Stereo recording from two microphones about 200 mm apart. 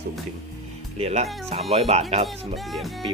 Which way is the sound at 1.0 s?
30° right (ahead or behind).